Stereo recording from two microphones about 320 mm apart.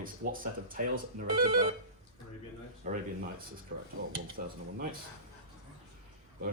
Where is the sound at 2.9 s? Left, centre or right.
Right.